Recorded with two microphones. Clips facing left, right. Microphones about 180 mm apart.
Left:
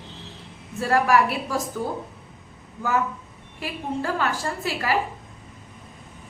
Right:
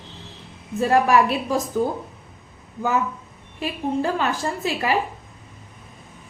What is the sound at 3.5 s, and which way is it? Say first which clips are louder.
A woman's voice: right 5 dB; 20° right (ahead or behind).